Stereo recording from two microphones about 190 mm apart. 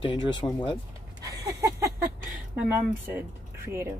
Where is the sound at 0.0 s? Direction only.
25° left (ahead or behind).